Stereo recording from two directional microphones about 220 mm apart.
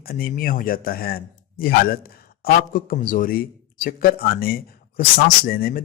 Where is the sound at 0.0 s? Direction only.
40° left (ahead or behind).